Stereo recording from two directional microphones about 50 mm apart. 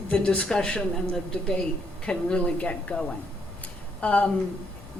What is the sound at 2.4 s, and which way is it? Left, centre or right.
A woman's voice, left.